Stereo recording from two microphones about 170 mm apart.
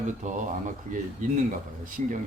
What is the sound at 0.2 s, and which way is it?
Speech, 45° right (ahead or behind).